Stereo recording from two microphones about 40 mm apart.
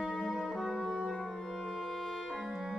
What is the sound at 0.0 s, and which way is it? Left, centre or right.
Music, centre.